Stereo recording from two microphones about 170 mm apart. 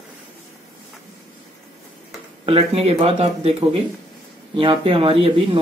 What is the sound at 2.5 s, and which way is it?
Speech, 35° right (ahead or behind).